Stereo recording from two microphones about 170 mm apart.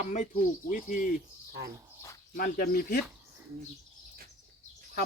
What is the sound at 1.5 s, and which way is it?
Speech, 70° right (ahead or behind).